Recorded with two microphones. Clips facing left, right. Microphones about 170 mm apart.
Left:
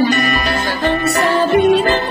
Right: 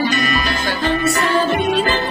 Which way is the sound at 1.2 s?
45° left (ahead or behind).